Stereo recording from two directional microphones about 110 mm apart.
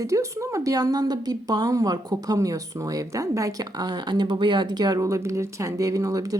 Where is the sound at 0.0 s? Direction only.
30° right (ahead or behind).